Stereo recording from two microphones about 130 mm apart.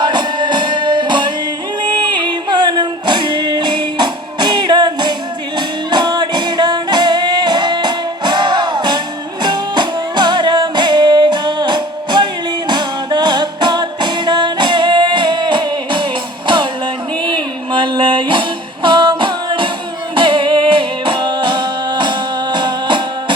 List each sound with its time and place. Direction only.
0.0 s music: 35° right (ahead or behind)
16.5 s a sound: 40° right (ahead or behind)
20.1 s music: 40° right (ahead or behind)